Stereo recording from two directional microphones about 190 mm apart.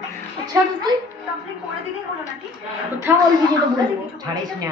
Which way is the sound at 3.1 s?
10° right (ahead or behind).